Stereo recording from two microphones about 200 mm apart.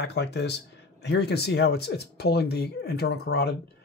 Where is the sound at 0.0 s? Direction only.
55° left (ahead or behind).